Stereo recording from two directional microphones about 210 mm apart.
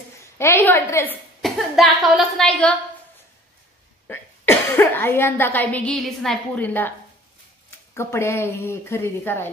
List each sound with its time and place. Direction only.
0.2 s a woman's voice: 10° left (ahead or behind)
1.4 s a woman's voice: centre (ahead or behind)
4.1 s speech: 10° left (ahead or behind)
7.9 s speech: 10° left (ahead or behind)